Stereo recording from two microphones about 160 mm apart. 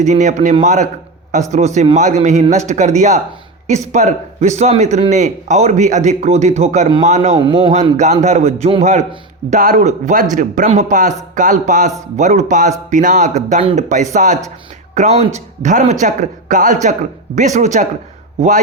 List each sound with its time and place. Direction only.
0.0 s a man's voice: 50° right (ahead or behind); by 7.7 s 35° right (ahead or behind)
7.7 s a man's voice: 45° right (ahead or behind)